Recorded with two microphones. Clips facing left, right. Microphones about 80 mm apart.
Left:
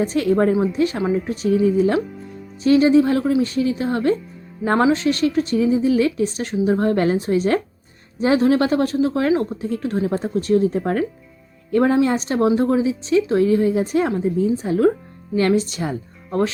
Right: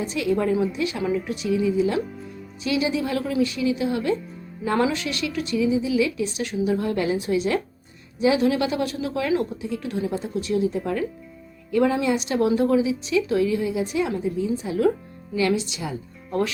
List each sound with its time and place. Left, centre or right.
0.0 s a woman's voice: left